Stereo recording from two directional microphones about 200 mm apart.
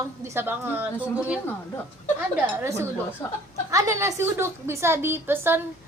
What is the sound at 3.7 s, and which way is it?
Speech, 15° right (ahead or behind).